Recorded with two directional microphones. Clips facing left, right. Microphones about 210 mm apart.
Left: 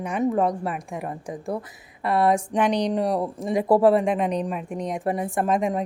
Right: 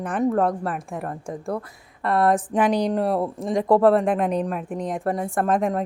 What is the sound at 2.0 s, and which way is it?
Speech, 5° left (ahead or behind).